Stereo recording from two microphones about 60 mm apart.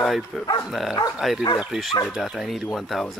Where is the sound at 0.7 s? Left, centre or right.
Centre.